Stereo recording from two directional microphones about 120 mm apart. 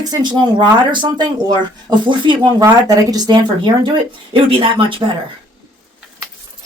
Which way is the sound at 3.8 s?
45° right (ahead or behind).